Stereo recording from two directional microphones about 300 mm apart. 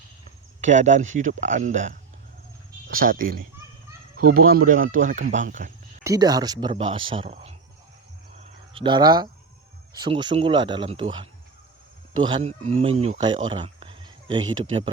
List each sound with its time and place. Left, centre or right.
0.6 s speech: right
6.0 s speech: centre
8.7 s speech: centre